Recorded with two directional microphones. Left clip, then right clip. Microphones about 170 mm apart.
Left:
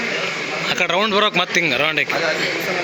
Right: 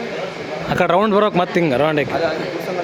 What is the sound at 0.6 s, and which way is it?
Speech, 40° right (ahead or behind).